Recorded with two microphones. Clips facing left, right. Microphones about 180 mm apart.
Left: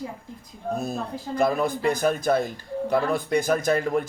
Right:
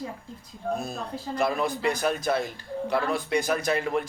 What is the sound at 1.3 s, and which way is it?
Speech, 50° left (ahead or behind).